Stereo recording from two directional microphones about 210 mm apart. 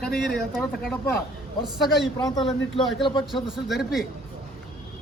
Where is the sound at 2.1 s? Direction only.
15° left (ahead or behind).